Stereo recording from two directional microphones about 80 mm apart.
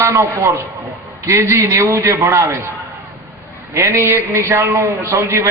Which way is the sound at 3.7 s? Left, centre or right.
Right.